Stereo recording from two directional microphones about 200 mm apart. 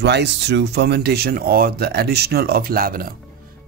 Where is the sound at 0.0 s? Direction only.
60° right (ahead or behind).